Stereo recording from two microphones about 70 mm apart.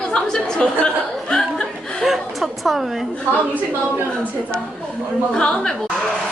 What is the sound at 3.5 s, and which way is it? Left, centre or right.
Speech, right.